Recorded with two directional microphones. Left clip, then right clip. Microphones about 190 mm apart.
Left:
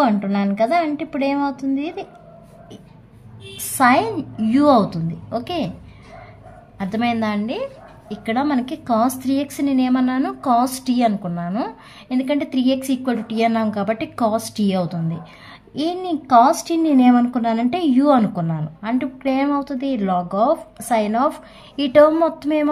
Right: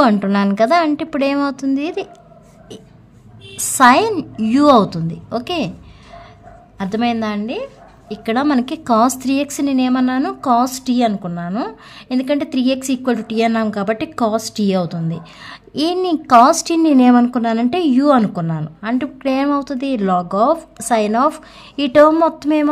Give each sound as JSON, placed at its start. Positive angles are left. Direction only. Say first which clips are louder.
{"t": 0.0, "sound": "a woman's voice", "louder": "right 4 dB", "side_deg": -40}
{"t": 3.5, "sound": "a woman's voice", "louder": "right 5 dB", "side_deg": -30}
{"t": 6.8, "sound": "a woman's voice", "louder": "right 2 dB", "side_deg": -20}
{"t": 8.3, "sound": "a woman's voice", "louder": "right 4 dB", "side_deg": -30}